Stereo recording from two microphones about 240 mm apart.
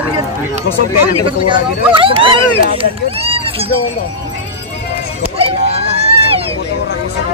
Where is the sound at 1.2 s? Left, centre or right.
Right.